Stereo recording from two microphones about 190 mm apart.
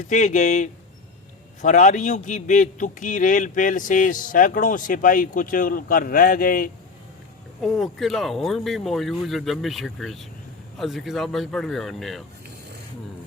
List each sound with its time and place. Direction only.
0.1 s a man's voice: 40° left (ahead or behind)
7.6 s speech: centre (ahead or behind)